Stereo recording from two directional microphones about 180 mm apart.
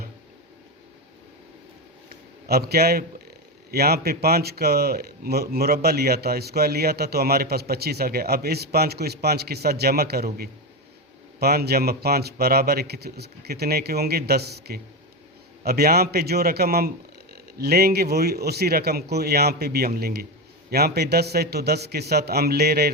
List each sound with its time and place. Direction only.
2.5 s a man's voice: 60° right (ahead or behind)